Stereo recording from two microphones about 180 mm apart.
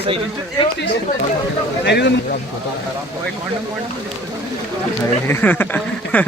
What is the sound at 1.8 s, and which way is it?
Speech, 70° left (ahead or behind).